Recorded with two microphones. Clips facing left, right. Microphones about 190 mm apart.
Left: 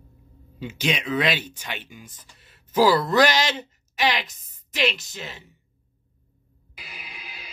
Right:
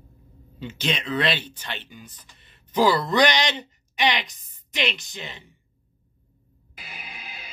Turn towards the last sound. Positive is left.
turn(degrees=-50)  # may be behind; listen again after turning